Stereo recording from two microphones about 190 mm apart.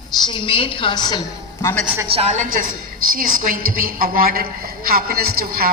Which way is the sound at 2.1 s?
35° right (ahead or behind).